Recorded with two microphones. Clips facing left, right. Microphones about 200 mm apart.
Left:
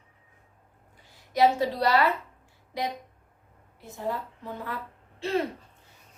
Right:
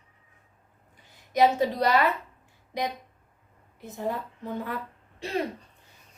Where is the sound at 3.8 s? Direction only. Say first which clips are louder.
Right 3 dB; 20° right (ahead or behind).